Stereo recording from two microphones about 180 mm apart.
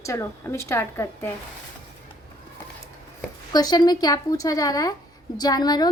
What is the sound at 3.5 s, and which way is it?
A woman's voice, 20° left (ahead or behind).